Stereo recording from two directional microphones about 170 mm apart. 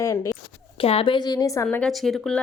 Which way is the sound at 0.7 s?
35° left (ahead or behind).